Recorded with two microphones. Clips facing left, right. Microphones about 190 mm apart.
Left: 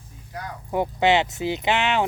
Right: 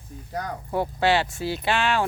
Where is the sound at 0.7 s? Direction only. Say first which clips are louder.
Left 2 dB; 20° left (ahead or behind).